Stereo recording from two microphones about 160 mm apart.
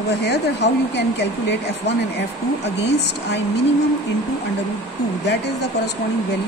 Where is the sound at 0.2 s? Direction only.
90° left.